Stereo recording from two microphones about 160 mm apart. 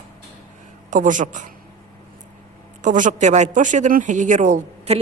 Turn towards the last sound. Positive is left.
turn(degrees=-45)  # may be behind; listen again after turning